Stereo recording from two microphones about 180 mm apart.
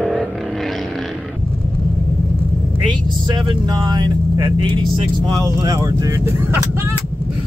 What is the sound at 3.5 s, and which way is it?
Vehicle, 25° right (ahead or behind).